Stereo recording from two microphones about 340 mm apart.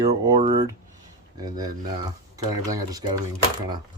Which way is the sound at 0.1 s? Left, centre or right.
Centre.